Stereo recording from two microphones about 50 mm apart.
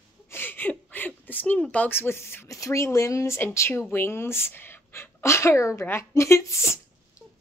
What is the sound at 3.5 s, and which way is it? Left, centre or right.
Speech, left.